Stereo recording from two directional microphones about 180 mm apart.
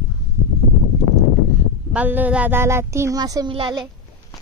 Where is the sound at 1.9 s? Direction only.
10° right (ahead or behind); by 3.8 s 25° right (ahead or behind).